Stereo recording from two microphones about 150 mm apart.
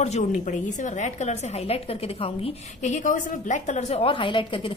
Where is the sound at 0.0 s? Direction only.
50° left (ahead or behind).